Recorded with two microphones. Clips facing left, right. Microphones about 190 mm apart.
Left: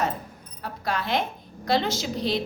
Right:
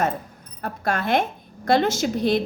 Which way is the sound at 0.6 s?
50° right (ahead or behind).